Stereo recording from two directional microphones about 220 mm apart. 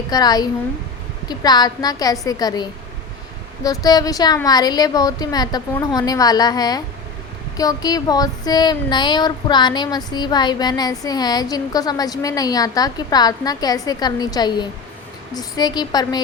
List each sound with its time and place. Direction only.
0.1 s speech: 15° left (ahead or behind)